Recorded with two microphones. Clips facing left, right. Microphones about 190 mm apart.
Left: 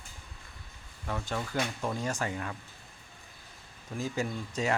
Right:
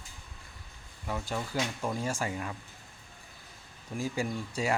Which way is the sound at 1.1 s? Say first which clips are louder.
Even; 10° right (ahead or behind).